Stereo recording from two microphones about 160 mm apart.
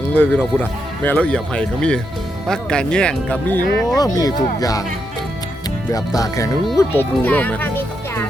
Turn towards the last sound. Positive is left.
turn(degrees=10)  # may be behind; listen again after turning